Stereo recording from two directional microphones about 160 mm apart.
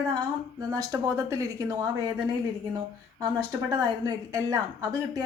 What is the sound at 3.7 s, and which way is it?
Speech, 25° right (ahead or behind).